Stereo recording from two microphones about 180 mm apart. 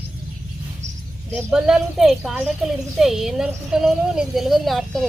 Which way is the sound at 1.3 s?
5° right (ahead or behind).